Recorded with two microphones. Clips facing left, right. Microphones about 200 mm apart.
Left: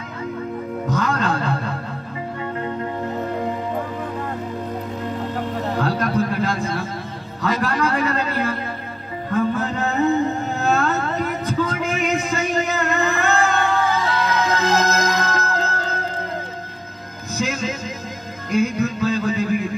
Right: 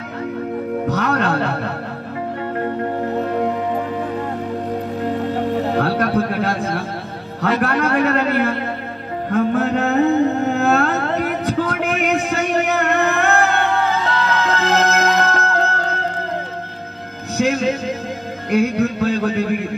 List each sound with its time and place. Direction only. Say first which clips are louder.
0.8 s music: right 1 dB; 65° right (ahead or behind)
5.8 s a sound: even; 65° right (ahead or behind)
7.4 s a man's voice: right 3 dB; 65° right (ahead or behind)
9.3 s music: right 4 dB; 70° right (ahead or behind)
14.1 s music: right 1 dB; 15° left (ahead or behind)
14.6 s music: right 2 dB; 60° right (ahead or behind)
17.4 s music: right 7 dB; 60° right (ahead or behind)